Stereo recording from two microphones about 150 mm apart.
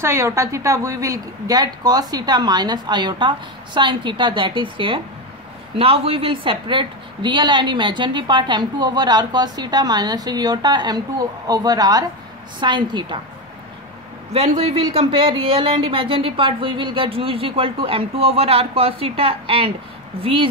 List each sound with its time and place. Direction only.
0.0 s a woman's voice: 20° right (ahead or behind)
14.5 s speech: 35° right (ahead or behind)